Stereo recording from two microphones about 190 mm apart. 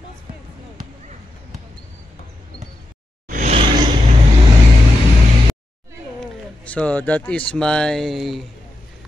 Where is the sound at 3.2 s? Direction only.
45° right (ahead or behind).